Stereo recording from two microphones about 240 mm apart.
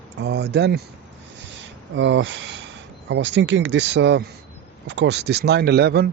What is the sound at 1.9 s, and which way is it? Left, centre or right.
Speech, right.